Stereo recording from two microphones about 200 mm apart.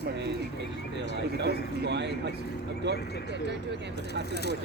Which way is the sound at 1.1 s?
60° right (ahead or behind).